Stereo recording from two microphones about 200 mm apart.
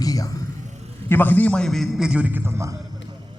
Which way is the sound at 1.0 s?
10° left (ahead or behind).